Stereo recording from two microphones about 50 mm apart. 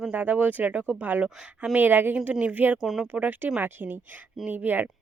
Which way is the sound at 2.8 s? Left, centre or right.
Centre.